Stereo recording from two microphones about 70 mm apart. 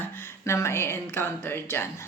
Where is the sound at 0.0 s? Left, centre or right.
Left.